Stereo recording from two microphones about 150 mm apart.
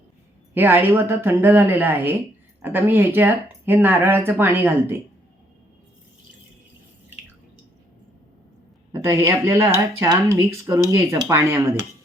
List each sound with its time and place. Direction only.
0.5 s speech: 15° right (ahead or behind)
9.0 s speech: 20° right (ahead or behind)